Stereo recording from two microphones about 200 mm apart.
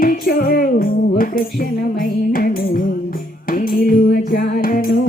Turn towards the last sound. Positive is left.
turn(degrees=45)  # may be behind; listen again after turning